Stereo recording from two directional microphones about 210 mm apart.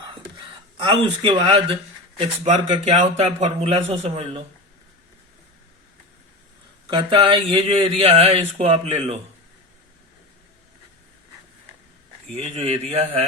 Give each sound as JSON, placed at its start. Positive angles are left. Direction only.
{"t": 0.1, "sound": "a sound", "side_deg": -20}
{"t": 2.1, "sound": "a man's voice", "side_deg": -25}
{"t": 6.8, "sound": "a man's voice", "side_deg": -20}
{"t": 12.3, "sound": "a man's voice", "side_deg": -25}